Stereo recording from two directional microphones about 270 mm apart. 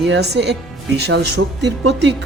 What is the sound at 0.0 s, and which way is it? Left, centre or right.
Speech, right.